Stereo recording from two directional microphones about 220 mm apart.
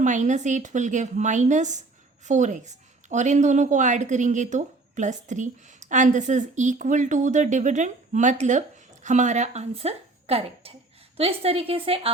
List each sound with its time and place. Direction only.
0.0 s a woman's voice: 35° right (ahead or behind)